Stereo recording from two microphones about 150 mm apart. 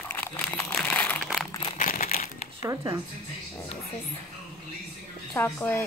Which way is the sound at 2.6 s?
20° right (ahead or behind).